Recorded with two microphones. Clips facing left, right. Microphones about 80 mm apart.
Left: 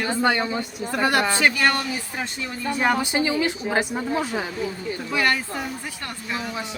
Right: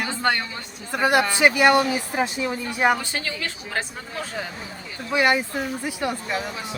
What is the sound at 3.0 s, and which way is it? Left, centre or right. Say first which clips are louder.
A woman's voice: left 8 dB; centre.